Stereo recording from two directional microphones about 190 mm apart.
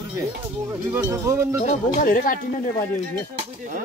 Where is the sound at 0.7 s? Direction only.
15° right (ahead or behind).